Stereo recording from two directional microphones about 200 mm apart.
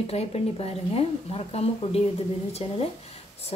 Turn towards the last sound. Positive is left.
turn(degrees=30)  # may be behind; listen again after turning